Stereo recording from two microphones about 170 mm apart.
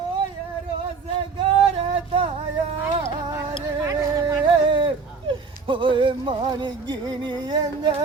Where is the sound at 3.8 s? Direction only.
15° right (ahead or behind).